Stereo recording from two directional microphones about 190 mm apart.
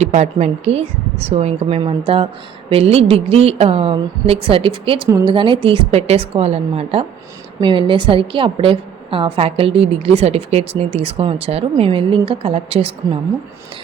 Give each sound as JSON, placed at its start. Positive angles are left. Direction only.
{"t": 0.0, "sound": "a woman's voice", "side_deg": -35}